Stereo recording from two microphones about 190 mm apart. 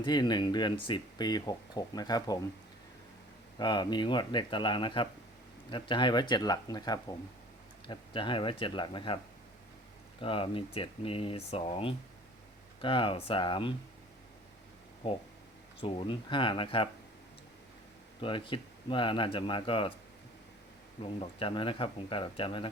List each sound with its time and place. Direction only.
0.0 s speech: 20° left (ahead or behind)
3.6 s speech: 25° left (ahead or behind)
10.2 s speech: 30° left (ahead or behind)
15.8 s speech: 25° left (ahead or behind)
18.2 s speech: 25° left (ahead or behind)
21.0 s speech: 30° left (ahead or behind)